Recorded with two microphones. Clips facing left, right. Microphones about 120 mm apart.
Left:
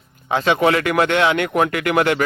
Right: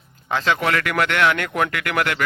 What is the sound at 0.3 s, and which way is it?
A man's voice, 20° left (ahead or behind).